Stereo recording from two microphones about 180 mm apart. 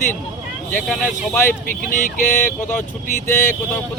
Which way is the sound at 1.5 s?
50° left (ahead or behind).